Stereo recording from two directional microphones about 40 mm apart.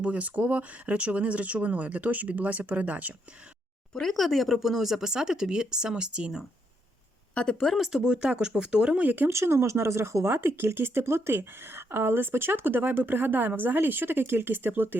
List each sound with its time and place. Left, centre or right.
0.0 s speech: right
3.9 s speech: centre; by 6.3 s right
7.6 s speech: centre
8.0 s speech: right
9.0 s speech: right
9.5 s speech: right